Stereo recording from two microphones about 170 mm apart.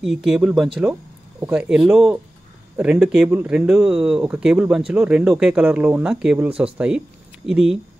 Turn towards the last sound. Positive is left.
turn(degrees=0)  # may be behind; listen again after turning